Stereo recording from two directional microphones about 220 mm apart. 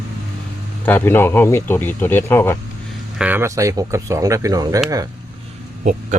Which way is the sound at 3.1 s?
10° right (ahead or behind).